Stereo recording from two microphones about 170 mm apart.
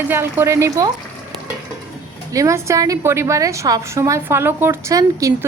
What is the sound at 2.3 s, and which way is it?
A woman's voice, 20° right (ahead or behind).